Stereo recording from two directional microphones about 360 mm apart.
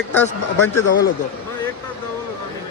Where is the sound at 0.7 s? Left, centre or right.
Left.